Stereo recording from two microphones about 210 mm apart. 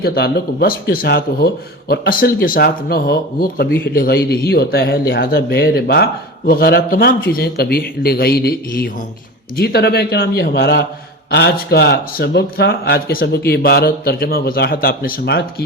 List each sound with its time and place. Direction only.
0.0 s speech: 50° left (ahead or behind)